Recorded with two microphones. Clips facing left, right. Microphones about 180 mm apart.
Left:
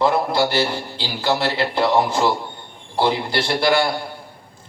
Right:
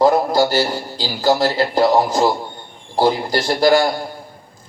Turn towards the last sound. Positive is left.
turn(degrees=-40)  # may be behind; listen again after turning